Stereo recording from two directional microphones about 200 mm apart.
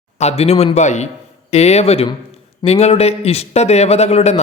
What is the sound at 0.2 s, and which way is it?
A man's voice, 30° left (ahead or behind).